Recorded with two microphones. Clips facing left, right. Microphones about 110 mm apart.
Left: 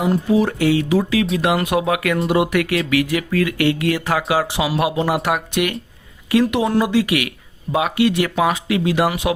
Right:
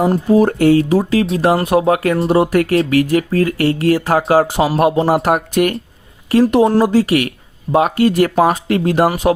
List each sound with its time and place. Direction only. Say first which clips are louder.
0.0 s speech: right 5 dB; 40° right (ahead or behind)